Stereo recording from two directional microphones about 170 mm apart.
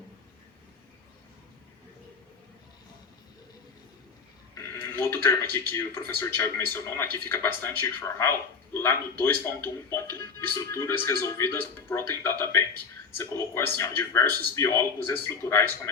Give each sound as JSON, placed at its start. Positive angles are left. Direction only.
{"t": 4.5, "sound": "speech", "side_deg": 15}